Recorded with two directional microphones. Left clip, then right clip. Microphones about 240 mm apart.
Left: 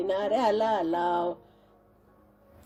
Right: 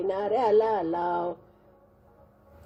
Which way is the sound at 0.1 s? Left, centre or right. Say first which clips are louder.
Right 2 dB; left.